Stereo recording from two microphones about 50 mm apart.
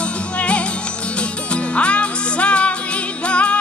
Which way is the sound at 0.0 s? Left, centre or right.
Left.